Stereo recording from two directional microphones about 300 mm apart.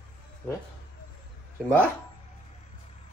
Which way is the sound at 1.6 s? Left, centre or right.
Centre.